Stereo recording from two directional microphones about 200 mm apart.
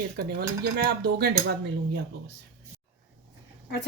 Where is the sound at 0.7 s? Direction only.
50° right (ahead or behind).